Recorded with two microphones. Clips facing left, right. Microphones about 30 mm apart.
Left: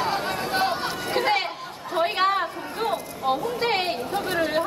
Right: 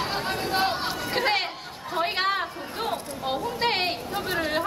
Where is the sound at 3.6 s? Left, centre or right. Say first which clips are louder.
Left 1 dB; right.